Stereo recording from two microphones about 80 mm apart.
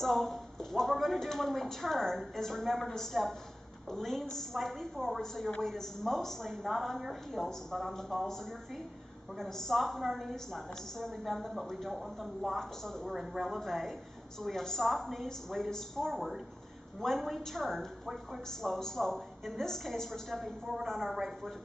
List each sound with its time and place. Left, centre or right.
0.0 s a woman's voice: centre
9.4 s a woman's voice: centre